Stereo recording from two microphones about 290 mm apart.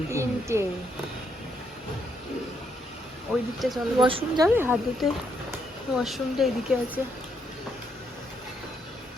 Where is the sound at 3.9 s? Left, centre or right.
Centre.